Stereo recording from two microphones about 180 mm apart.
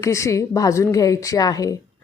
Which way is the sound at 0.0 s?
15° left (ahead or behind).